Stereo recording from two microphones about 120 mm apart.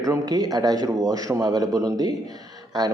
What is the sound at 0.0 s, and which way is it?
Speech, 30° right (ahead or behind).